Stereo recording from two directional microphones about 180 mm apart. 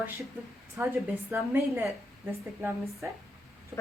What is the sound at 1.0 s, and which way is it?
A woman's voice, 15° right (ahead or behind).